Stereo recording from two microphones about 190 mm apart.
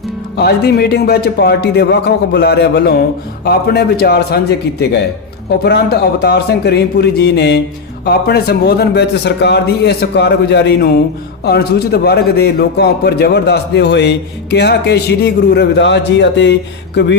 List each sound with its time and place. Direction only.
0.3 s a man's voice: 60° left (ahead or behind)